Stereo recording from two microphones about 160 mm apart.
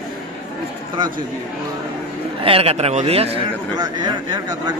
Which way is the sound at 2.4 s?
35° right (ahead or behind).